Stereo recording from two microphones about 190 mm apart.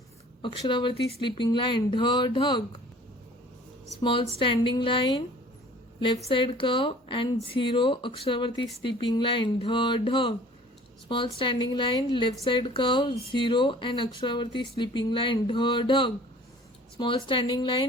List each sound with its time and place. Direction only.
0.4 s a woman's voice: 25° left (ahead or behind)
4.0 s a woman's voice: 25° left (ahead or behind)
6.2 s a woman's voice: 25° left (ahead or behind)